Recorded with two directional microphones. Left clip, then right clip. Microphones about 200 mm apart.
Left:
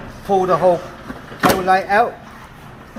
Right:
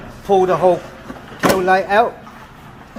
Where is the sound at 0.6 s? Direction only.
40° right (ahead or behind).